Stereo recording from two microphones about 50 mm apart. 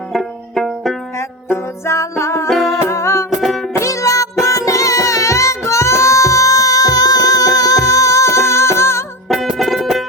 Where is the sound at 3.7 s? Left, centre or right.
Left.